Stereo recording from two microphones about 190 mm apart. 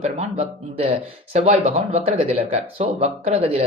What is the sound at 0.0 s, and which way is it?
A man's voice, 35° right (ahead or behind).